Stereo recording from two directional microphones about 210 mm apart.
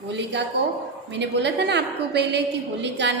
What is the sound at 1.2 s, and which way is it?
A woman's voice, 55° right (ahead or behind).